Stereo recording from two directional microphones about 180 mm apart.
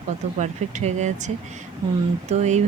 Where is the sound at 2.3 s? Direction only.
40° right (ahead or behind).